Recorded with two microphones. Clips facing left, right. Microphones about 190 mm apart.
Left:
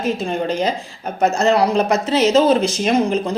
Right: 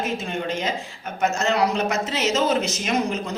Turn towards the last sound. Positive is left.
turn(degrees=30)  # may be behind; listen again after turning